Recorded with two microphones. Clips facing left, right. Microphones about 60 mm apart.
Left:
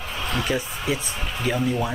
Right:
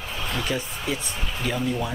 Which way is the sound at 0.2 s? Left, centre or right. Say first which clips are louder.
Left 3 dB; centre.